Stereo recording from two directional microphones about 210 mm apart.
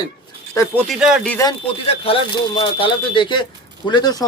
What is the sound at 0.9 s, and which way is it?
Speech, centre (ahead or behind).